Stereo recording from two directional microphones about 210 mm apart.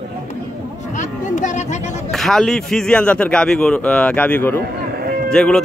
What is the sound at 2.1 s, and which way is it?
A man's voice, centre (ahead or behind).